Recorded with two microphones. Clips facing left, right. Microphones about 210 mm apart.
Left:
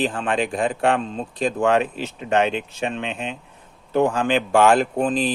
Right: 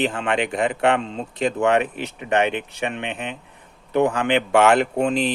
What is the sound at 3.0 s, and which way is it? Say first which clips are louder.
A man's voice: left 1 dB; 60° right (ahead or behind).